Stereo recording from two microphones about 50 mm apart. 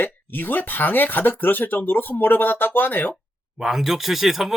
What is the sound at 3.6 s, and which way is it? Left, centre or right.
Speech, centre.